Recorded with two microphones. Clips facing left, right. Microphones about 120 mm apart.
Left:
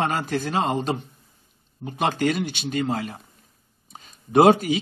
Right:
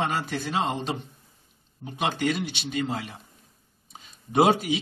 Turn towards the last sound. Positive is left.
turn(degrees=50)  # may be behind; listen again after turning